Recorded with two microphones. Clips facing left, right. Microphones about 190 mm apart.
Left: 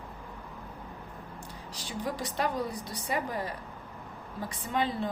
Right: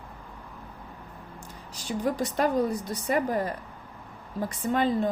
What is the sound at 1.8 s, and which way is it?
A woman's voice, 45° right (ahead or behind).